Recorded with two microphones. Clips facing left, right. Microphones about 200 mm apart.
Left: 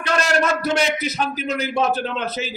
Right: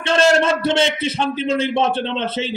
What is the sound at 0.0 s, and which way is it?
A man's voice, 25° right (ahead or behind).